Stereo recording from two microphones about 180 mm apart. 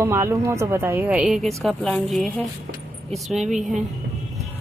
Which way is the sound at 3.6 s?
45° right (ahead or behind).